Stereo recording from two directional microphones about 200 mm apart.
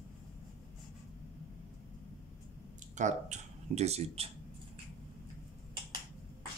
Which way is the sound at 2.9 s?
35° right (ahead or behind).